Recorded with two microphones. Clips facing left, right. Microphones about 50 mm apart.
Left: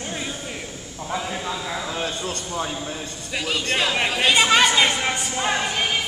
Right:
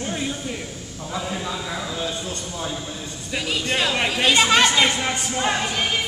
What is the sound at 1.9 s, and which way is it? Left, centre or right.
Speech, left.